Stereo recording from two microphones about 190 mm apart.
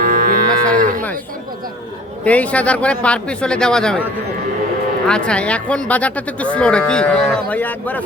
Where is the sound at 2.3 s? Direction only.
5° left (ahead or behind).